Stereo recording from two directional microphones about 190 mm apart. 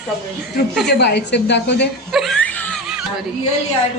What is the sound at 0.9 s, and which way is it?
A woman's voice, 65° left (ahead or behind).